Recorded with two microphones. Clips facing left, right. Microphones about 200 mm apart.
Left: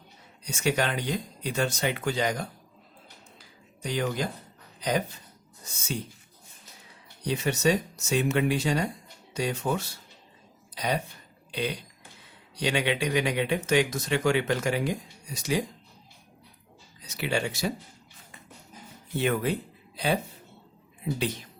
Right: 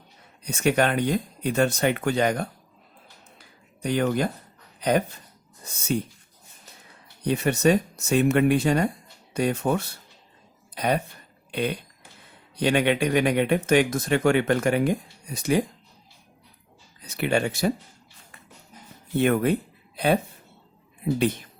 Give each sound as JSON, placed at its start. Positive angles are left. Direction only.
{"t": 0.4, "sound": "speech", "side_deg": -55}
{"t": 3.8, "sound": "speech", "side_deg": -55}
{"t": 7.3, "sound": "speech", "side_deg": -55}
{"t": 17.0, "sound": "speech", "side_deg": -55}
{"t": 19.1, "sound": "speech", "side_deg": -55}